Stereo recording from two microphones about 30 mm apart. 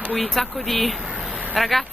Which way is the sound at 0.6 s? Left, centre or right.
Centre.